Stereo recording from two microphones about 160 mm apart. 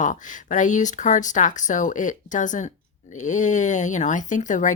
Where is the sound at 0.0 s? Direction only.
55° left (ahead or behind).